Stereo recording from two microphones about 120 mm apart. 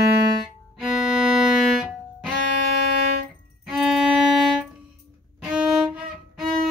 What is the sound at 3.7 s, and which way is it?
Violin, 5° right (ahead or behind).